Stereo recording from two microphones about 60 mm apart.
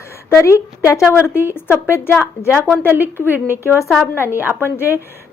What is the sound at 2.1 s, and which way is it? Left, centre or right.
Speech, left.